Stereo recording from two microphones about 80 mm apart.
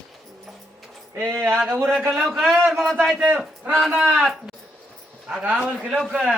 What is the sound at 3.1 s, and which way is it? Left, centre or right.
Speech, centre.